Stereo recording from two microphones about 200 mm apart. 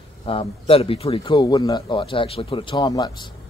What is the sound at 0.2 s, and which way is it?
A man's voice, 30° left (ahead or behind).